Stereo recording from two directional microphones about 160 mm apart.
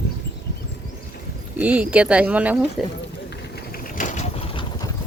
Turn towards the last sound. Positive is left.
turn(degrees=45)  # may be behind; listen again after turning